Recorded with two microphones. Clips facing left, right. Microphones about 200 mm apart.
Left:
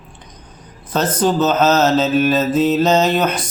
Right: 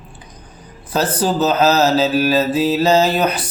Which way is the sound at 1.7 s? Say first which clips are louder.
Left 1 dB; 10° right (ahead or behind).